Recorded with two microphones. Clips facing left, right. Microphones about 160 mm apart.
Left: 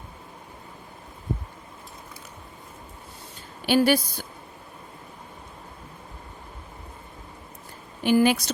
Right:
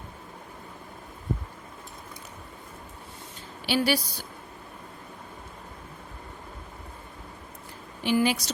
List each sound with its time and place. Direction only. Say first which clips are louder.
3.7 s a woman's voice: left 5 dB; 50° left (ahead or behind)
8.0 s a woman's voice: left 5 dB; 50° left (ahead or behind)